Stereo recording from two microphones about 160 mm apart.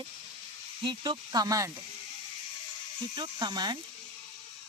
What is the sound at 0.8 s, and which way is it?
Speech, 30° right (ahead or behind).